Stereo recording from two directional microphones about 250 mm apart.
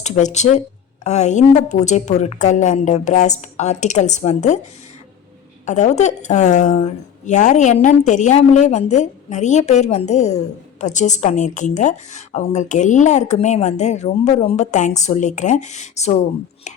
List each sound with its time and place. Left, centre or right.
0.0 s a woman's voice: left
5.6 s a woman's voice: left